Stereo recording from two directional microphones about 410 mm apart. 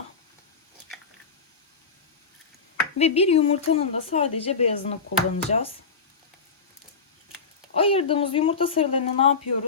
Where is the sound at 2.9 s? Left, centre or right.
Centre.